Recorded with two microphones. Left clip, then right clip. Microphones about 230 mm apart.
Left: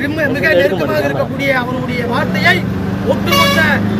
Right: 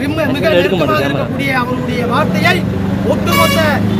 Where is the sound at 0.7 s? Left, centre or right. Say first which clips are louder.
Right 2 dB; right.